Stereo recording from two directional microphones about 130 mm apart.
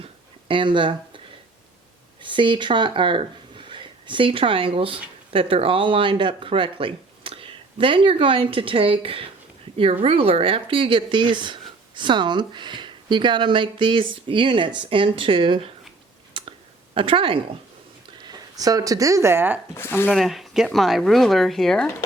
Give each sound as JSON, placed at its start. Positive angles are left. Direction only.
{"t": 0.0, "sound": "a sound", "side_deg": -40}
{"t": 2.2, "sound": "speech", "side_deg": -40}
{"t": 16.3, "sound": "a sound", "side_deg": -40}
{"t": 18.2, "sound": "speech", "side_deg": -30}
{"t": 19.7, "sound": "speech", "side_deg": 15}
{"t": 20.1, "sound": "speech", "side_deg": 0}